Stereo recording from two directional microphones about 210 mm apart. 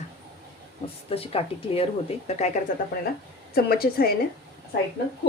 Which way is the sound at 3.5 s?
45° left (ahead or behind).